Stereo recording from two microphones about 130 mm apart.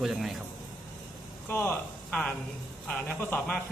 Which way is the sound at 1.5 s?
10° left (ahead or behind).